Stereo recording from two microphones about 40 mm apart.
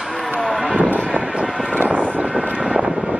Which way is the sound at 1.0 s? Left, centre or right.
Right.